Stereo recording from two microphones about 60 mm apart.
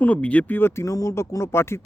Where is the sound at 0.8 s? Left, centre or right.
Left.